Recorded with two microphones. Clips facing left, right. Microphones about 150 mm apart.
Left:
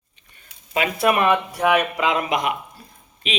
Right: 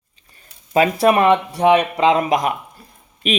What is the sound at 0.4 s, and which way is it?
Speech, 35° right (ahead or behind).